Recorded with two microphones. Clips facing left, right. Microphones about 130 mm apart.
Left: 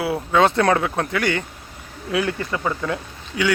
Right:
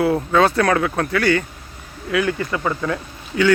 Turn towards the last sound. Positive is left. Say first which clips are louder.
# right 4 dB
turn(degrees=15)  # may be behind; listen again after turning